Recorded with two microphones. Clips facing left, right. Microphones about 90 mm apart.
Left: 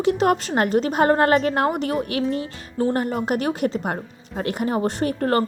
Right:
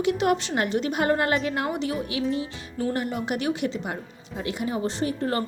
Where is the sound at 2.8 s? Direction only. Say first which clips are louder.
Left 5 dB; 40° left (ahead or behind); by 5.4 s 55° left (ahead or behind).